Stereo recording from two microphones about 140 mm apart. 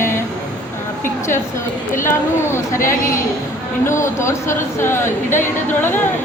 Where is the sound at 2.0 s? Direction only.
20° left (ahead or behind).